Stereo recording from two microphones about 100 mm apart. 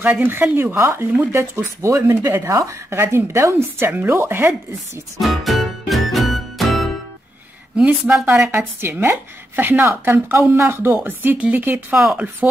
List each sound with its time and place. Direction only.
0.0 s speech: 20° right (ahead or behind)
5.2 s music: centre (ahead or behind)
7.7 s a woman's voice: 10° right (ahead or behind)
8.5 s speech: 20° right (ahead or behind)
12.0 s a woman's voice: 5° right (ahead or behind)